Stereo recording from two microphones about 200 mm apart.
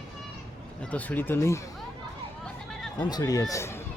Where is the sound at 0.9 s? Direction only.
10° left (ahead or behind).